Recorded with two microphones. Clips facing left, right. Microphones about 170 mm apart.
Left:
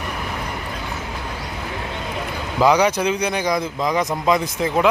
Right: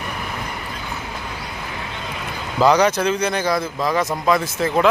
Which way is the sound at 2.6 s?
10° left (ahead or behind).